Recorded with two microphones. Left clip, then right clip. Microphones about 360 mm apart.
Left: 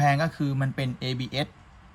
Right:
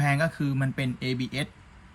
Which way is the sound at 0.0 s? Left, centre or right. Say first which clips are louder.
Left 2 dB; centre.